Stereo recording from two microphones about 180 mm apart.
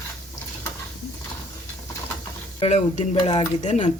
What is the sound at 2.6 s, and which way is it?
Speech, 35° left (ahead or behind).